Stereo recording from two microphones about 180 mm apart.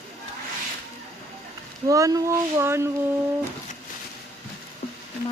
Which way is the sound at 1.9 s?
20° right (ahead or behind).